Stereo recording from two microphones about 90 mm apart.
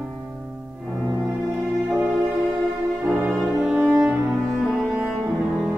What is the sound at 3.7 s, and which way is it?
Cello, 20° right (ahead or behind).